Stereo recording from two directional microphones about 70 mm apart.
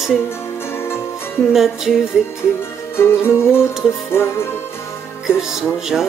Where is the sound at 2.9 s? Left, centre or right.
Left.